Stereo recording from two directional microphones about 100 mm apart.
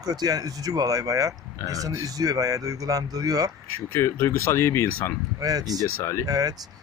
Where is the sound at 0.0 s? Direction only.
40° right (ahead or behind).